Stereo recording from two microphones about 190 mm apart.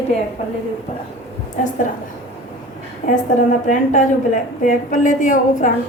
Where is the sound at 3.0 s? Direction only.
35° left (ahead or behind).